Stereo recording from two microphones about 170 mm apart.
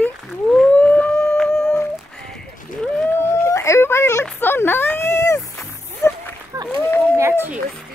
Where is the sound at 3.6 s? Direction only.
15° left (ahead or behind).